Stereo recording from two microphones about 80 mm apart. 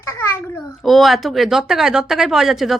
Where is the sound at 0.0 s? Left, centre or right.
Left.